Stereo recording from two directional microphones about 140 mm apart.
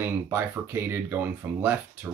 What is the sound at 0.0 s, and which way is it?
Speech, 15° right (ahead or behind).